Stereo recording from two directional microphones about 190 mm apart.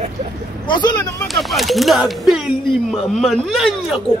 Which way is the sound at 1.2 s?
Centre (ahead or behind).